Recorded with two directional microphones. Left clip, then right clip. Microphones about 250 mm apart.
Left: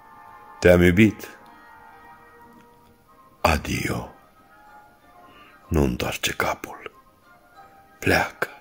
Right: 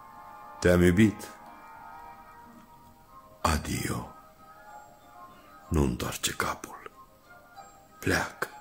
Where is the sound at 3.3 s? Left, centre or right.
Centre.